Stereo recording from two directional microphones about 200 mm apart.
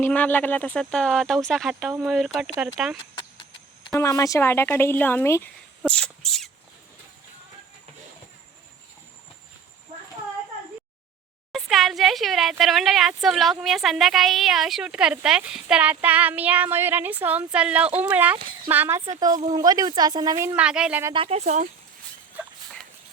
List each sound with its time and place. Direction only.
0.0 s speech: 10° left (ahead or behind)
3.9 s speech: 15° left (ahead or behind)
11.5 s a woman's voice: centre (ahead or behind); by 20.6 s 15° right (ahead or behind)
20.6 s speech: 5° right (ahead or behind)
21.1 s speech: 30° right (ahead or behind)